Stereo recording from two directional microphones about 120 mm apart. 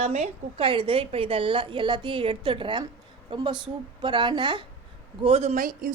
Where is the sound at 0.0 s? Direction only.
60° right (ahead or behind); by 4.6 s 45° right (ahead or behind).